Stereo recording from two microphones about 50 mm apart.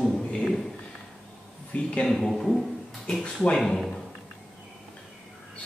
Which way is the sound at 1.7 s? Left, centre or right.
Left.